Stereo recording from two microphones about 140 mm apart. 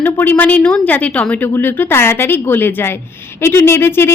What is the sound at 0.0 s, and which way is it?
Speech, 15° left (ahead or behind).